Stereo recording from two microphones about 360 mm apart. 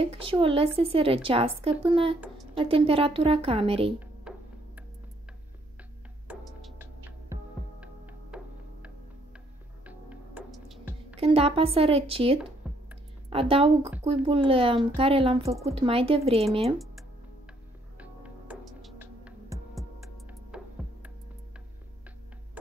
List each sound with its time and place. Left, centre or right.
0.0 s a woman's voice: centre
2.1 s speech: centre
2.5 s a woman's voice: centre
4.3 s music: centre
6.2 s music: centre
9.8 s music: centre
11.1 s a woman's voice: centre
12.6 s music: centre
13.3 s a woman's voice: centre
17.9 s music: centre